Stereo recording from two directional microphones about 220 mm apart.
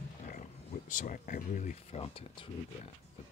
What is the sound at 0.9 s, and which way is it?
Speech, 35° left (ahead or behind).